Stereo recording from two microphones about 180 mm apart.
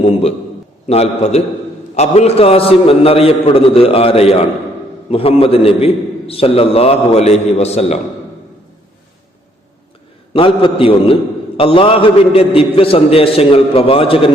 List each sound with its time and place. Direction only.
0.0 s a man's voice: 35° left (ahead or behind)
10.3 s a man's voice: 30° left (ahead or behind)